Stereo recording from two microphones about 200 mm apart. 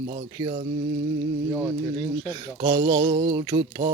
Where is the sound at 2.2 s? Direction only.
20° right (ahead or behind).